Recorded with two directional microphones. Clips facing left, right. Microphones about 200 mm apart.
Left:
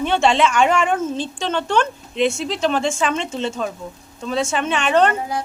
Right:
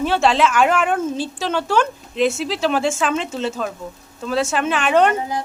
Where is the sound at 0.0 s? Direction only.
5° right (ahead or behind).